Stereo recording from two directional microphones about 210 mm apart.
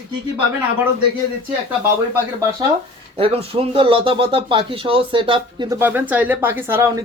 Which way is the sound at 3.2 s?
25° right (ahead or behind).